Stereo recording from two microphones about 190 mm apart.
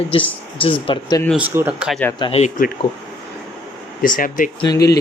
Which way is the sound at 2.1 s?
25° left (ahead or behind).